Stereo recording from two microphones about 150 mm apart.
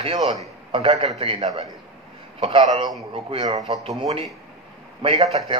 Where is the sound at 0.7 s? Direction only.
40° right (ahead or behind).